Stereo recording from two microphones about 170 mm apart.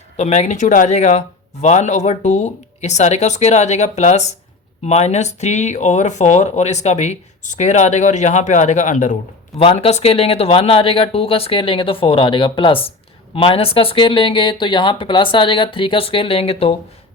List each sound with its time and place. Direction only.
0.2 s speech: 40° left (ahead or behind)
9.6 s speech: 35° left (ahead or behind)